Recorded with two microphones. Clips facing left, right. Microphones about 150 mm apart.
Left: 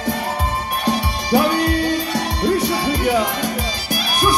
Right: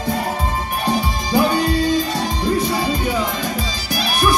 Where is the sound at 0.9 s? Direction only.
70° left (ahead or behind).